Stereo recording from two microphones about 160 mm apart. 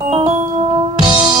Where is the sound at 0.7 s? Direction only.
30° right (ahead or behind).